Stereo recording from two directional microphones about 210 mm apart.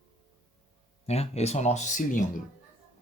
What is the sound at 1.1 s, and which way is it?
Speech, 30° left (ahead or behind).